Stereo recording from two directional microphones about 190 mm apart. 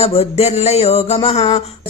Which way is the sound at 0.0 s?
35° left (ahead or behind).